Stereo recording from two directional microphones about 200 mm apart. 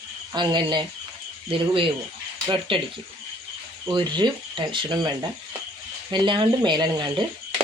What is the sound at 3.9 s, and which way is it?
Speech, 20° right (ahead or behind).